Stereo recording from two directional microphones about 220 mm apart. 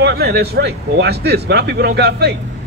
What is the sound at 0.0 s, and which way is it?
A man's voice, 45° right (ahead or behind).